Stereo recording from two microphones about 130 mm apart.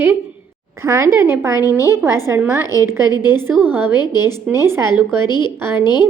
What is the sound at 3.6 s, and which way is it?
A woman's voice, 15° right (ahead or behind).